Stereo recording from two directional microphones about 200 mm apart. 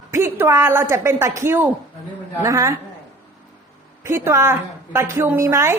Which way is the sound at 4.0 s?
15° right (ahead or behind).